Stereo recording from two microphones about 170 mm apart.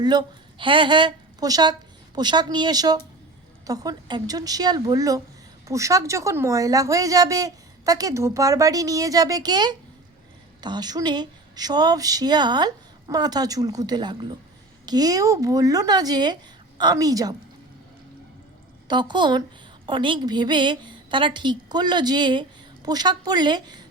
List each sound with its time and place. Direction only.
0.0 s a woman's voice: 25° right (ahead or behind)
18.9 s a woman's voice: 25° right (ahead or behind)